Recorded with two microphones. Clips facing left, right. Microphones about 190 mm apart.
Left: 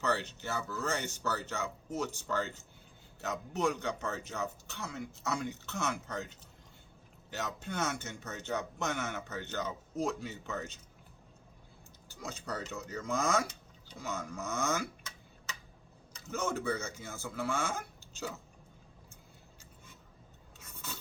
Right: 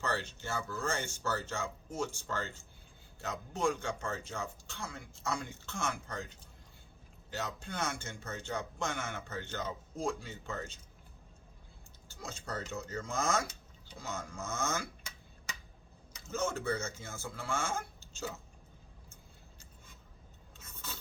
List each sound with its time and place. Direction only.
0.0 s speech: 20° left (ahead or behind)
12.2 s speech: 15° left (ahead or behind)
16.2 s speech: 15° left (ahead or behind)